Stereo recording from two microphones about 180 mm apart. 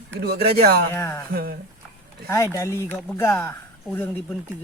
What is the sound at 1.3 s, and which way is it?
Speech, 55° right (ahead or behind).